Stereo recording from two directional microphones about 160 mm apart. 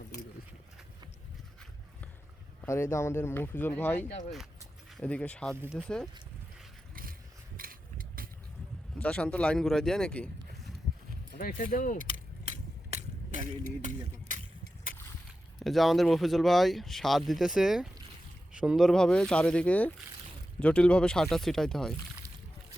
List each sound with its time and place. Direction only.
2.6 s speech: 15° left (ahead or behind)
7.5 s vehicle: 60° right (ahead or behind)
9.0 s speech: 5° left (ahead or behind)
11.3 s speech: 65° left (ahead or behind)
12.1 s a sound: 45° right (ahead or behind)
15.5 s speech: centre (ahead or behind)